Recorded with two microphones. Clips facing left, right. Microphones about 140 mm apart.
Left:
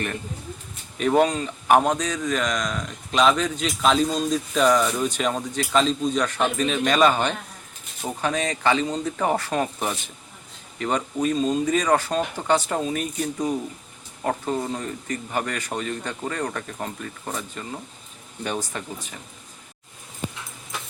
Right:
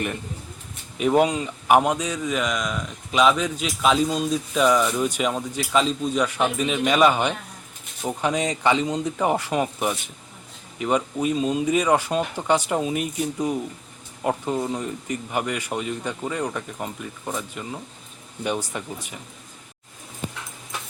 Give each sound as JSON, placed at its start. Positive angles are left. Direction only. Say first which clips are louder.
{"t": 0.9, "sound": "a man's voice", "louder": "even", "side_deg": -10}